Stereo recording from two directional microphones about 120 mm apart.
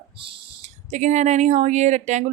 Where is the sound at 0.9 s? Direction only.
80° right.